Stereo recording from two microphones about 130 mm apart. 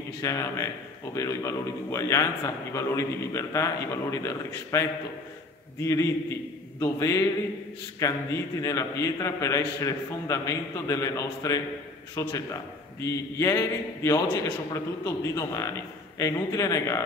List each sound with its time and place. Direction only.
0.2 s a man's voice: 25° left (ahead or behind)